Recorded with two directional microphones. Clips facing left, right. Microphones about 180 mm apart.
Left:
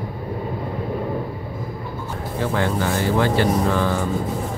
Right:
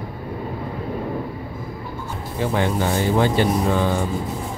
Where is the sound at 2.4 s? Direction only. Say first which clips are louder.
Right 1 dB; 20° right (ahead or behind).